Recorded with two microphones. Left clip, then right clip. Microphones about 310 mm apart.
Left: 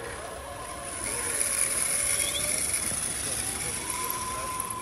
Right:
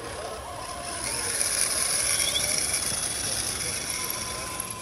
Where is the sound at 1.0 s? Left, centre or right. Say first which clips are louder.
Right 2 dB; right.